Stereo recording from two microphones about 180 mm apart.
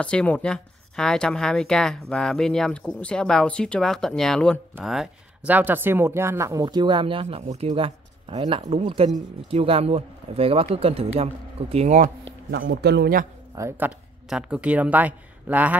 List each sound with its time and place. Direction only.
0.0 s speech: 5° left (ahead or behind); by 12.1 s 40° right (ahead or behind)
12.3 s a sound: 90° right
12.6 s a man's voice: 65° right (ahead or behind)
13.6 s speech: 10° right (ahead or behind)